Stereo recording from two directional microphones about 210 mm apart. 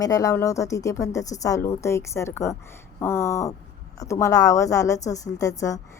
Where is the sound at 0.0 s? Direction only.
15° left (ahead or behind).